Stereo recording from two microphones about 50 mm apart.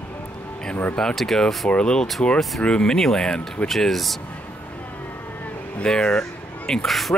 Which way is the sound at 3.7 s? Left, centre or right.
Centre.